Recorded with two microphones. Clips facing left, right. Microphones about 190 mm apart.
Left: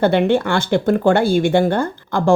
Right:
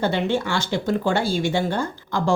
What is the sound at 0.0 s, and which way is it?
A woman's voice, 60° left (ahead or behind).